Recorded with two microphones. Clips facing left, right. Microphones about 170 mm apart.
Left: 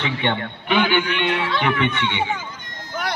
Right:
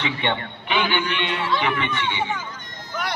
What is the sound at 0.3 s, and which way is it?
A man's voice, 50° left (ahead or behind).